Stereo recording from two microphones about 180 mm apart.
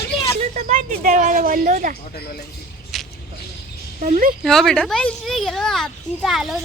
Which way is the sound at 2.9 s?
Centre (ahead or behind).